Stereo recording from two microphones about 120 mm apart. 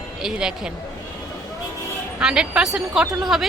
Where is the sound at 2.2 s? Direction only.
5° right (ahead or behind).